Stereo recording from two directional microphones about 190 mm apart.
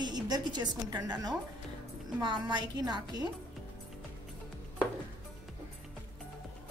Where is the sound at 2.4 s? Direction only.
20° right (ahead or behind).